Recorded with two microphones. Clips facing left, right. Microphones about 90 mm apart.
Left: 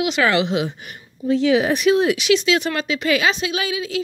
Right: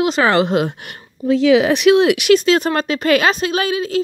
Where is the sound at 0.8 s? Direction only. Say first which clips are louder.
Right 3 dB; 90° right; by 4.0 s 45° right (ahead or behind).